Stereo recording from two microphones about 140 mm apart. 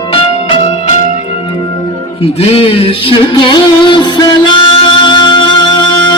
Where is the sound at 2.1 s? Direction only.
45° left (ahead or behind).